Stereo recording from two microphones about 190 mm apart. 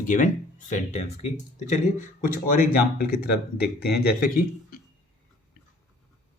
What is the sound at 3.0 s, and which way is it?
A man's voice, 55° left (ahead or behind).